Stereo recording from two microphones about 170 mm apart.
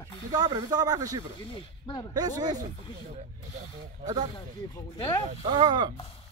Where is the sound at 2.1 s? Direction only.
25° right (ahead or behind).